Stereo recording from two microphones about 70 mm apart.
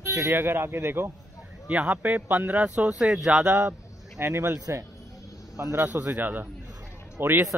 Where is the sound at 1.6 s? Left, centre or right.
Right.